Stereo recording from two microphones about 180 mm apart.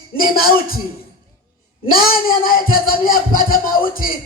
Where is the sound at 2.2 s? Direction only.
50° left (ahead or behind).